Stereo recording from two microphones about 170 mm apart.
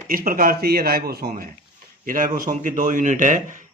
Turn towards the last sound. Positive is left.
turn(degrees=-50)  # may be behind; listen again after turning